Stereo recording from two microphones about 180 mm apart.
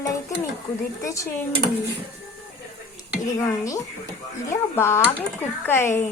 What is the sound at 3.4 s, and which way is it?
A woman's voice, 20° left (ahead or behind).